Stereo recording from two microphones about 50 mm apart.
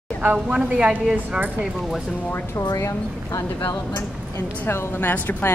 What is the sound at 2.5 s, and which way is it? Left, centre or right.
Speech, left.